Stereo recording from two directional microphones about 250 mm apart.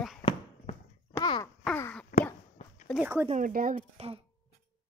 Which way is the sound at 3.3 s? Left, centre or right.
Right.